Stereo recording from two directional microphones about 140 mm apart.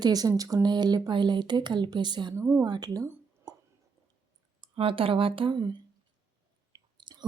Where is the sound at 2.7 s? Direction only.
25° right (ahead or behind).